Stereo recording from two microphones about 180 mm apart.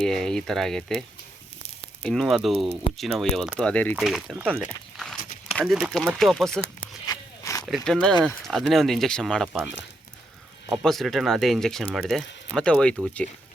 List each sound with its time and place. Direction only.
0.0 s speech: 5° left (ahead or behind)
2.0 s speech: centre (ahead or behind)
4.6 s walk: centre (ahead or behind)
5.5 s speech: centre (ahead or behind)
7.1 s walk: 20° left (ahead or behind)
7.9 s speech: 5° left (ahead or behind)
10.7 s speech: centre (ahead or behind)